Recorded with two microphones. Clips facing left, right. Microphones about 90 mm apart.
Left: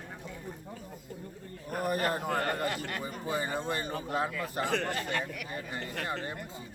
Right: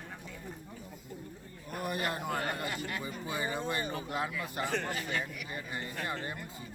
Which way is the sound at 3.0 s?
40° left (ahead or behind).